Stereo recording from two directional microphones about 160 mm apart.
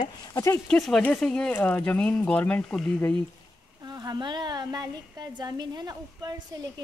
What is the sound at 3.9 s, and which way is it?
A woman's voice, 25° right (ahead or behind).